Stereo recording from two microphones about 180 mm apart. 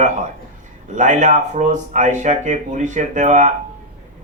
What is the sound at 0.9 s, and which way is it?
Speech, 45° right (ahead or behind).